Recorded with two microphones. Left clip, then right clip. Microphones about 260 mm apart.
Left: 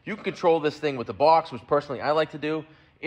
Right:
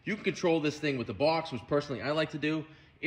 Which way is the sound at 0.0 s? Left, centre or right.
Centre.